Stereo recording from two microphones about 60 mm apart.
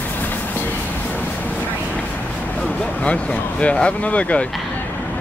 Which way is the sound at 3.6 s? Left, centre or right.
Centre.